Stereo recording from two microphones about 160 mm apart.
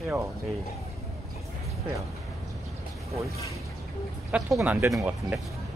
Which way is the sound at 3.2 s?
20° left (ahead or behind).